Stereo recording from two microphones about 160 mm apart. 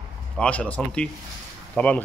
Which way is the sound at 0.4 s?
10° left (ahead or behind).